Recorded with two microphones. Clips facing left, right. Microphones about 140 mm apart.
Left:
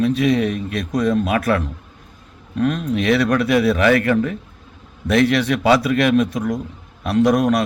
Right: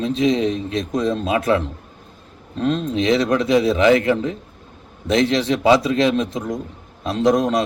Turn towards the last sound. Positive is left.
turn(degrees=-25)  # may be behind; listen again after turning